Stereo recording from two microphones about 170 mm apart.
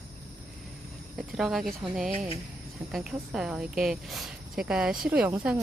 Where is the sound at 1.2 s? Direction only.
Centre (ahead or behind).